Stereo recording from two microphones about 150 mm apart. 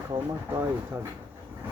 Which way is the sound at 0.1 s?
20° right (ahead or behind).